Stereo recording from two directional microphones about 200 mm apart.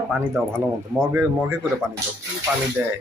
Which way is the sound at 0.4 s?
10° right (ahead or behind).